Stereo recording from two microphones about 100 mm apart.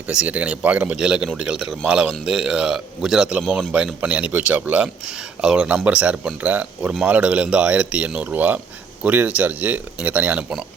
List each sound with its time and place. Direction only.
0.1 s a man's voice: 15° right (ahead or behind)